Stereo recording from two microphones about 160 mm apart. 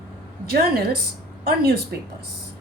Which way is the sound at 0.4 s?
70° right (ahead or behind).